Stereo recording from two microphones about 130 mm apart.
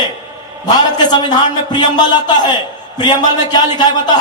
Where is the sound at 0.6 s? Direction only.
30° left (ahead or behind).